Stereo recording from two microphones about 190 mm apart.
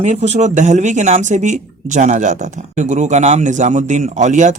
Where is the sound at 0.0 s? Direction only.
35° right (ahead or behind).